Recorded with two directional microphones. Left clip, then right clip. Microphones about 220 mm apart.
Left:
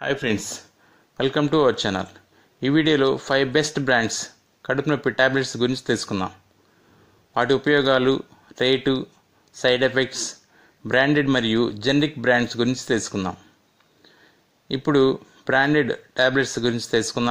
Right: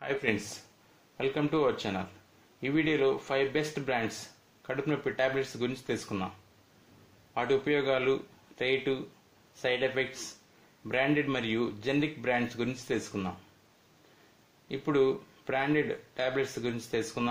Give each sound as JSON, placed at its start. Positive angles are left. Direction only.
{"t": 0.0, "sound": "speech", "side_deg": 45}
{"t": 7.3, "sound": "speech", "side_deg": 40}
{"t": 11.2, "sound": "speech", "side_deg": 40}
{"t": 14.7, "sound": "speech", "side_deg": 40}